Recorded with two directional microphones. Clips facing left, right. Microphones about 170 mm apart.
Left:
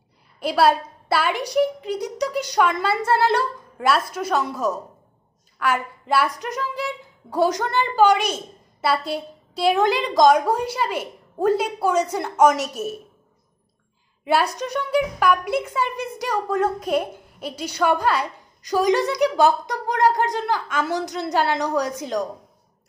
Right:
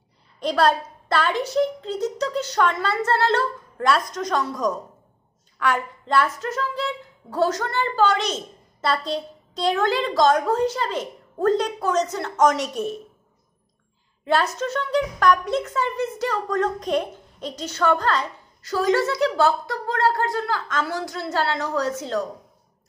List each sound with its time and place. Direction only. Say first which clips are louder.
0.4 s a woman's voice: left 2 dB; 10° left (ahead or behind)
14.2 s a woman's voice: left 1 dB; 15° left (ahead or behind)